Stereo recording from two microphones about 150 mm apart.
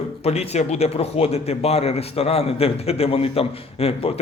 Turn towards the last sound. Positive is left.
turn(degrees=40)  # may be behind; listen again after turning